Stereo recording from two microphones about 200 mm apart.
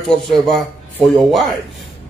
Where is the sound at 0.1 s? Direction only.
Centre (ahead or behind).